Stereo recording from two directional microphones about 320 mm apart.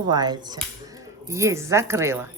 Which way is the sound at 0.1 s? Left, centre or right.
Centre.